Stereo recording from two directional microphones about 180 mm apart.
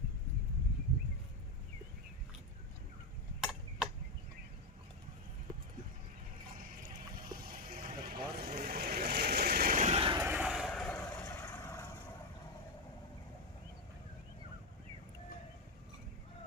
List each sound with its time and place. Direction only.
6.6 s vehicle: 50° right (ahead or behind)
9.9 s a sound: 30° right (ahead or behind)
10.2 s vehicle: 10° right (ahead or behind); by 11.9 s 15° left (ahead or behind)